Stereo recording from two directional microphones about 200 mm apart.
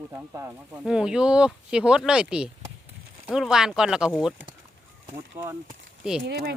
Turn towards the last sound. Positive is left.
turn(degrees=-50)  # may be behind; listen again after turning